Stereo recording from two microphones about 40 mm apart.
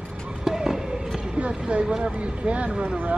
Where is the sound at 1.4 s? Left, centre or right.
Right.